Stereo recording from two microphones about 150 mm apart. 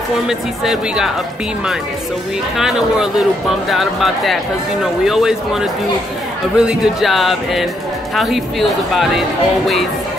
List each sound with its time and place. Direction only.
0.3 s speech: centre (ahead or behind)
2.5 s speech: 5° right (ahead or behind)